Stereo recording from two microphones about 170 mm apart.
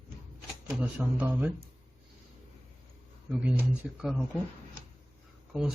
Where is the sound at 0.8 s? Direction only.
10° right (ahead or behind).